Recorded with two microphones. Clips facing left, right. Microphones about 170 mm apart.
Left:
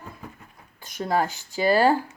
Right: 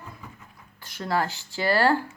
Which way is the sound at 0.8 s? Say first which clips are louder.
Left 2 dB; 20° left (ahead or behind).